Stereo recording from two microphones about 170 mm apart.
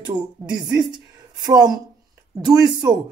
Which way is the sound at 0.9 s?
25° right (ahead or behind).